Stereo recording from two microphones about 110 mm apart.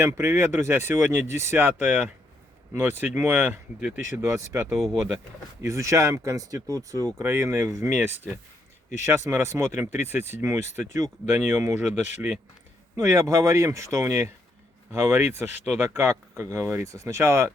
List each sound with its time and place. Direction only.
0.0 s speech: 25° right (ahead or behind)
4.2 s speech: 30° right (ahead or behind)
13.0 s speech: 25° right (ahead or behind)